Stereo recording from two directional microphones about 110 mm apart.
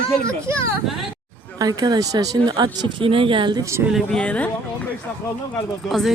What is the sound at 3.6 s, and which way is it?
Speech, 25° right (ahead or behind).